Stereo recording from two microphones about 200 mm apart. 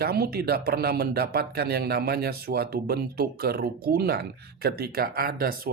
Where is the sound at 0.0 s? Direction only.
50° right (ahead or behind).